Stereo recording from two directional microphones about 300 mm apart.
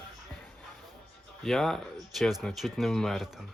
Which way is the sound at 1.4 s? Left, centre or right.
Centre.